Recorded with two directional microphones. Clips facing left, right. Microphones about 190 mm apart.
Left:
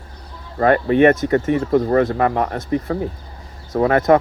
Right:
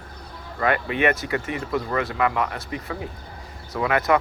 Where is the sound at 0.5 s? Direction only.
40° left (ahead or behind).